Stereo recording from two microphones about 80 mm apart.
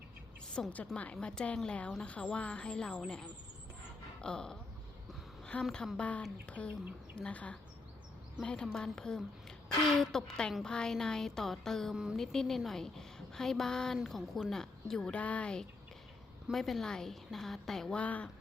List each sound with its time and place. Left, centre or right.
0.6 s speech: centre
4.2 s a sound: centre
5.7 s a woman's voice: centre
16.5 s a woman's voice: centre
18.0 s speech: centre